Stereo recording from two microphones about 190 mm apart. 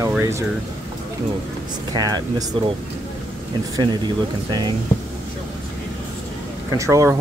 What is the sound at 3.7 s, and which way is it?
Speech, 20° right (ahead or behind).